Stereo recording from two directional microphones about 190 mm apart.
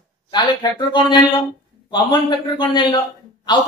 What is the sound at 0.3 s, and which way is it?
Speech, 25° left (ahead or behind).